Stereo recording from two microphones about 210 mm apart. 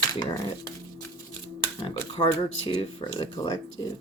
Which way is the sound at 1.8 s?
25° left (ahead or behind).